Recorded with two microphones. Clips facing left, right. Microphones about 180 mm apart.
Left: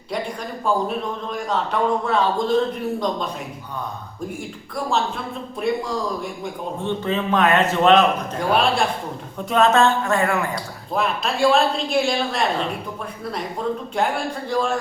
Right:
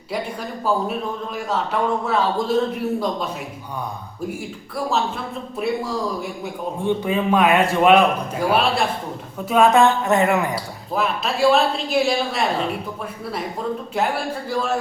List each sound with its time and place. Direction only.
0.6 s speech: 5° right (ahead or behind)
4.9 s a man's voice: 5° right (ahead or behind); by 10.5 s 20° right (ahead or behind)
10.5 s speech: centre (ahead or behind)
14.5 s speech: 5° right (ahead or behind)